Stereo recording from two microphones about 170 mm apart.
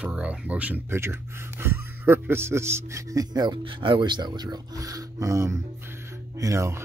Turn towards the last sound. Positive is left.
turn(degrees=-15)  # may be behind; listen again after turning